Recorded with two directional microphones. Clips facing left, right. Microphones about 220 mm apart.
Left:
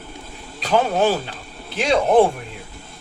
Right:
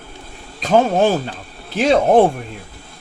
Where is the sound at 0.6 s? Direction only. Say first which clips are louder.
Right 4 dB; 45° right (ahead or behind).